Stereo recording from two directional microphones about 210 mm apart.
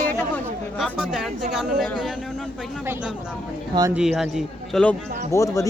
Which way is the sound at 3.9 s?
Centre (ahead or behind).